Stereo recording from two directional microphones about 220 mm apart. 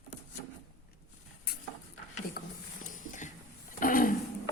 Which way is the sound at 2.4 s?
40° left (ahead or behind).